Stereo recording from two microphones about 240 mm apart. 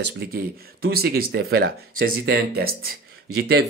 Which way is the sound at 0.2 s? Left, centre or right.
Right.